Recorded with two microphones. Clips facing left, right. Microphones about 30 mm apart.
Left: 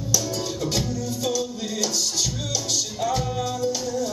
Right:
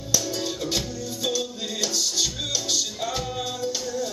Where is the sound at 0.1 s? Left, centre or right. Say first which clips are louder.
Even; centre.